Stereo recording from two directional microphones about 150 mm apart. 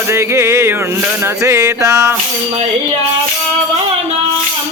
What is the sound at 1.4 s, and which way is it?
Music, 20° right (ahead or behind).